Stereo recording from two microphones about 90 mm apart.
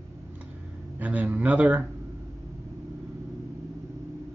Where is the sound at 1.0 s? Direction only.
15° right (ahead or behind).